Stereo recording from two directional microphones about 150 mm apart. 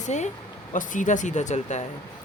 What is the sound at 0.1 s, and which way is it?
Speech, 50° left (ahead or behind).